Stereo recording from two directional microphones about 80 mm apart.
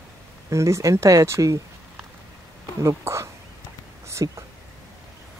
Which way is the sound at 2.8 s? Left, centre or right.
Right.